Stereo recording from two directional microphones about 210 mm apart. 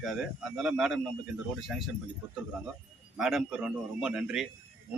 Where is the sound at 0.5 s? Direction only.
5° right (ahead or behind).